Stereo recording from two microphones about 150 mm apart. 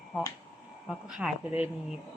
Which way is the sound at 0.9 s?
5° right (ahead or behind).